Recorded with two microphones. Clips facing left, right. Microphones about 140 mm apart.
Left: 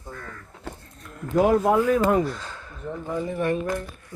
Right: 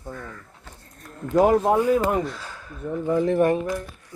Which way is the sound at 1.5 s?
30° right (ahead or behind).